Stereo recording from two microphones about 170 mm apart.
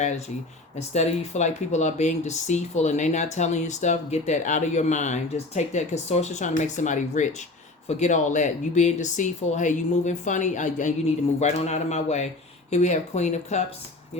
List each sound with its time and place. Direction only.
0.8 s a man's voice: 40° left (ahead or behind)